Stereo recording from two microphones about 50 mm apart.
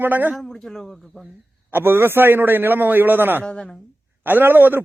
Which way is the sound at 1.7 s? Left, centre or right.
Right.